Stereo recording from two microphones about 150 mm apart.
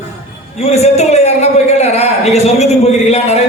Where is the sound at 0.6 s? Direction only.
45° left (ahead or behind).